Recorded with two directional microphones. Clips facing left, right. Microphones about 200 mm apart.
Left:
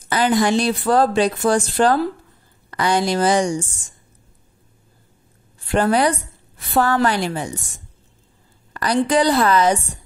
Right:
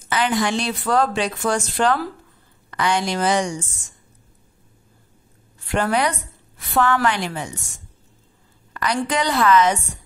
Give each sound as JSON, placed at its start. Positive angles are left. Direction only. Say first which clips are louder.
{"t": 0.1, "sound": "speech", "louder": "left 4 dB", "side_deg": 40}
{"t": 5.7, "sound": "speech", "louder": "left 4 dB", "side_deg": 35}
{"t": 8.7, "sound": "speech", "louder": "left 5 dB", "side_deg": 35}